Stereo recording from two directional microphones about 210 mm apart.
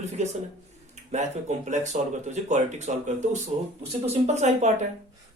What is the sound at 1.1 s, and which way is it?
Speech, 35° right (ahead or behind).